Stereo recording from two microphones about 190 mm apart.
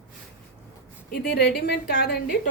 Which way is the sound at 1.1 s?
55° left (ahead or behind).